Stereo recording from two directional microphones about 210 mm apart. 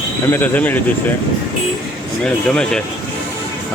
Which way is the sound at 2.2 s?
5° left (ahead or behind).